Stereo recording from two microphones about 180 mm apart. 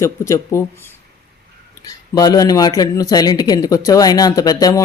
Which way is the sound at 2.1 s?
20° left (ahead or behind).